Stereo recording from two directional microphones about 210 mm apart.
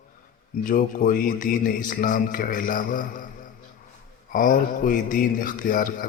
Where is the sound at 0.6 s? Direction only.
40° left (ahead or behind).